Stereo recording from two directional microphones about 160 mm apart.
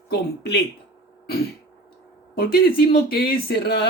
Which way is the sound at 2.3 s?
70° left (ahead or behind).